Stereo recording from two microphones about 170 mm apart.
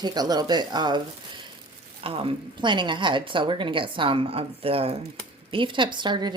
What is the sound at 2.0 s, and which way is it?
Speech, 35° right (ahead or behind).